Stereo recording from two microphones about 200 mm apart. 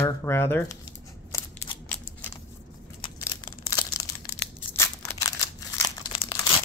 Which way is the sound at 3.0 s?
20° left (ahead or behind).